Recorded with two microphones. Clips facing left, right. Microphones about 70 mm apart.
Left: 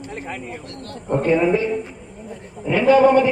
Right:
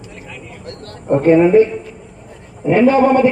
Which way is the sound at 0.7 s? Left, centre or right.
Right.